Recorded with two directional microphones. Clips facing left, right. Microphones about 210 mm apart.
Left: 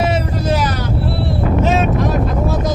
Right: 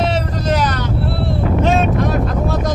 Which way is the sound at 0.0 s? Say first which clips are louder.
Left 1 dB; 10° left (ahead or behind).